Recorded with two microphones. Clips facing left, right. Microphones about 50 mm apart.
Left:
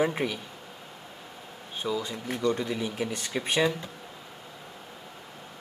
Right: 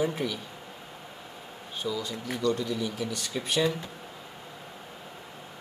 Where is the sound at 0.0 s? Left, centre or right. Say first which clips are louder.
Left 2 dB; left.